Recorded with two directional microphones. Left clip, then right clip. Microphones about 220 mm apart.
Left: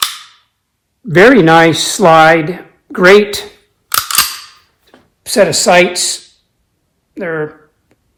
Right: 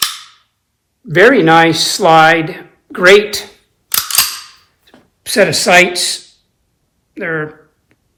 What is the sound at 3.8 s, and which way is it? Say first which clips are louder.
Cap gun: left 2 dB; 15° left (ahead or behind).